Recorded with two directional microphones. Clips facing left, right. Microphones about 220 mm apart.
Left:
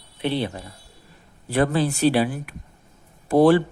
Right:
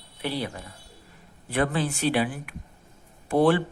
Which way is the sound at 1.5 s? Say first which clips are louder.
Left 5 dB; 40° left (ahead or behind).